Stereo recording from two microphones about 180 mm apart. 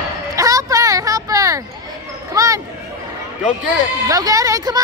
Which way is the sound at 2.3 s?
20° right (ahead or behind).